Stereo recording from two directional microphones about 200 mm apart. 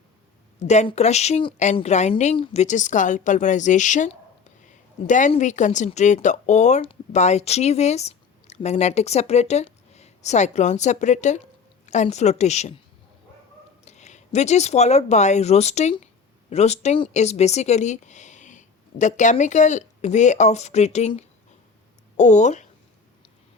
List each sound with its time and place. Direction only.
0.6 s speech: 35° left (ahead or behind)
13.8 s speech: 35° left (ahead or behind)